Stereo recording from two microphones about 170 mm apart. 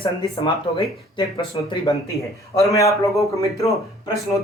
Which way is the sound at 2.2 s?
20° left (ahead or behind).